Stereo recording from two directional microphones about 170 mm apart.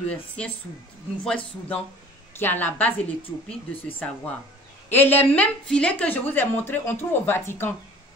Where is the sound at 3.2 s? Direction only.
30° left (ahead or behind).